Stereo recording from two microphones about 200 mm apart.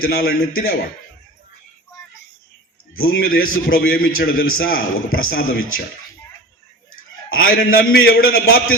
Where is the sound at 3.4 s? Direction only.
90° left.